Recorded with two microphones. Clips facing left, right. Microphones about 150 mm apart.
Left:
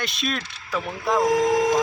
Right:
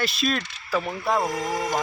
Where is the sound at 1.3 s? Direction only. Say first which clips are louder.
Left 8 dB; 90° left.